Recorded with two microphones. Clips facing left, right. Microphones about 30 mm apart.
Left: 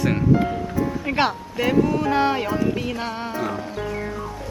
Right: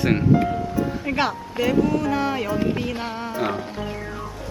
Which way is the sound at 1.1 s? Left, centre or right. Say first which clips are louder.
Left 2 dB; centre.